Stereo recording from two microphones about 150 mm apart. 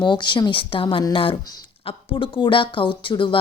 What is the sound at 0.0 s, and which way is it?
Speech, 30° left (ahead or behind).